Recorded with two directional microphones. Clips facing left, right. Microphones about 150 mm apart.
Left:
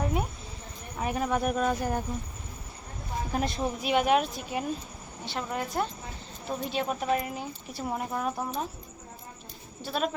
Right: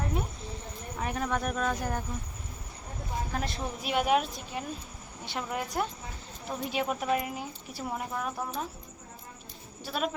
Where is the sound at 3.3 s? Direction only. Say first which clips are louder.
Left 9 dB; 15° left (ahead or behind).